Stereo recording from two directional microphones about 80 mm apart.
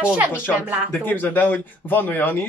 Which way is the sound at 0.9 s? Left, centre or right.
Left.